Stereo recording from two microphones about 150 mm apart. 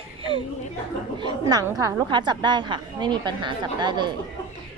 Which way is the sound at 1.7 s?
20° right (ahead or behind).